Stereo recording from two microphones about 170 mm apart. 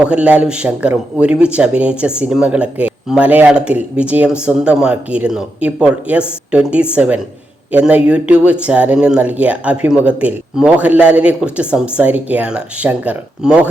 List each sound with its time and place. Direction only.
0.0 s a man's voice: 5° right (ahead or behind)